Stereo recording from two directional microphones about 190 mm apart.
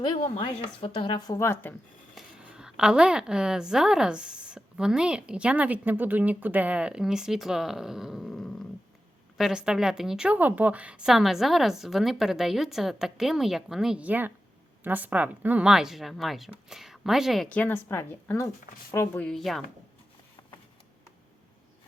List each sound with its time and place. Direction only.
0.0 s a woman's voice: 25° left (ahead or behind)
2.1 s a woman's voice: 5° right (ahead or behind)